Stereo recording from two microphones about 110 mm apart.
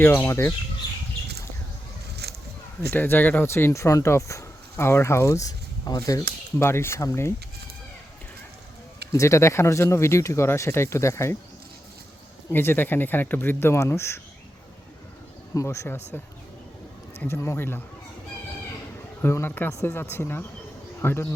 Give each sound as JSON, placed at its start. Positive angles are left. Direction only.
{"t": 0.0, "sound": "speech", "side_deg": 20}
{"t": 2.9, "sound": "speech", "side_deg": 15}
{"t": 9.1, "sound": "speech", "side_deg": 25}
{"t": 12.5, "sound": "speech", "side_deg": 20}
{"t": 15.5, "sound": "speech", "side_deg": 25}
{"t": 17.2, "sound": "speech", "side_deg": 25}
{"t": 19.2, "sound": "speech", "side_deg": 20}